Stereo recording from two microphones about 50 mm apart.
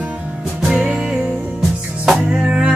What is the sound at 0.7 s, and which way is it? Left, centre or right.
Music, right.